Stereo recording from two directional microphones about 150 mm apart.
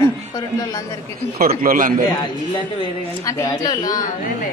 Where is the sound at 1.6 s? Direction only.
65° right (ahead or behind).